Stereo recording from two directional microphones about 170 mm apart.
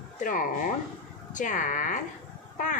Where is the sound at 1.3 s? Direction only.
50° left (ahead or behind).